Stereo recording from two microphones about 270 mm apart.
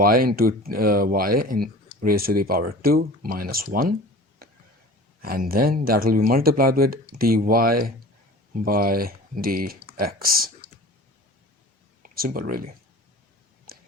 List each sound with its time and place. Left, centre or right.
0.0 s speech: right
5.2 s speech: right
12.0 s speech: right